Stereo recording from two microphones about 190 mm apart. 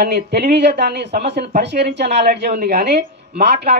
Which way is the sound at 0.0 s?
55° right (ahead or behind).